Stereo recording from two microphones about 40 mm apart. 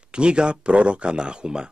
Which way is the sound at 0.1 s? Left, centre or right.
Right.